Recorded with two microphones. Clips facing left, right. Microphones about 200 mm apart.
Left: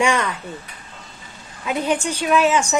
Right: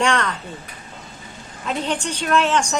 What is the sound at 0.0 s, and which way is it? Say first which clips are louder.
Speech: left 1 dB; 10° left (ahead or behind).